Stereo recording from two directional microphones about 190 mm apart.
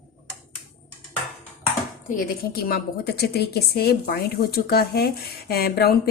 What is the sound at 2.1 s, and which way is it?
A woman's voice, 50° left (ahead or behind).